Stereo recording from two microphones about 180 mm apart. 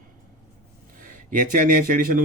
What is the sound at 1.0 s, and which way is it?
Speech, 50° right (ahead or behind).